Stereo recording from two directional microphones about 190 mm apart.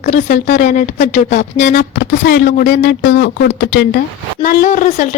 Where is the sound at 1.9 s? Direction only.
55° left (ahead or behind).